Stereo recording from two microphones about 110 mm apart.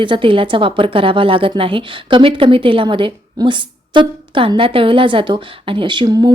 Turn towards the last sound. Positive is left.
turn(degrees=-40)  # may be behind; listen again after turning